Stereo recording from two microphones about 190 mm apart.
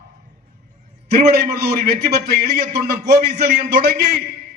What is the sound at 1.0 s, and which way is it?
A man's voice, 55° right (ahead or behind).